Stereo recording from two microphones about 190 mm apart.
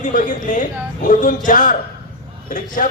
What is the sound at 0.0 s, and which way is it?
A man's voice, 45° left (ahead or behind).